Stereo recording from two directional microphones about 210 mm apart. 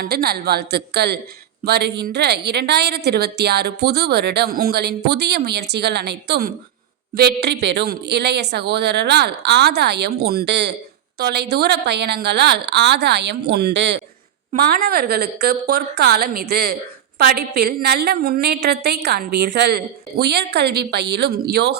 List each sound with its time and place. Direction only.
0.0 s a woman's voice: 50° right (ahead or behind)